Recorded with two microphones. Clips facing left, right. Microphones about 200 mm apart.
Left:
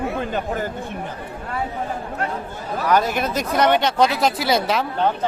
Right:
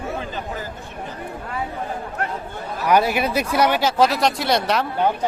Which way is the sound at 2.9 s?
10° right (ahead or behind).